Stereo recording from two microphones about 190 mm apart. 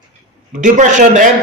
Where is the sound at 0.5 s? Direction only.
40° right (ahead or behind).